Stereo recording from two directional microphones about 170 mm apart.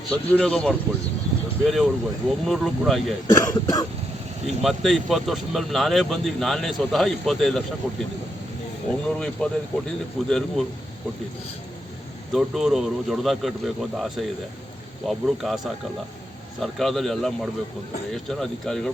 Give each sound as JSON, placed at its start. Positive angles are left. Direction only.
{"t": 0.1, "sound": "speech", "side_deg": 5}
{"t": 3.2, "sound": "speech", "side_deg": 20}
{"t": 4.4, "sound": "speech", "side_deg": 0}
{"t": 9.0, "sound": "speech", "side_deg": 5}
{"t": 12.3, "sound": "speech", "side_deg": 0}